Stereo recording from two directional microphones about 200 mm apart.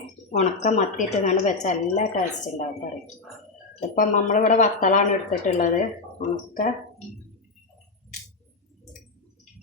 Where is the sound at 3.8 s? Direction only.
35° left (ahead or behind).